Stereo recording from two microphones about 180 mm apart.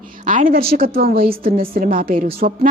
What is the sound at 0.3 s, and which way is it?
A woman's voice, 50° right (ahead or behind).